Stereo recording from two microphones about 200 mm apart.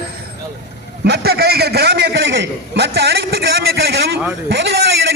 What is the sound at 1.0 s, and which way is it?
A man's voice, 55° right (ahead or behind).